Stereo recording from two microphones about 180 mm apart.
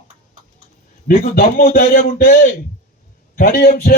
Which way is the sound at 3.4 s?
60° left (ahead or behind).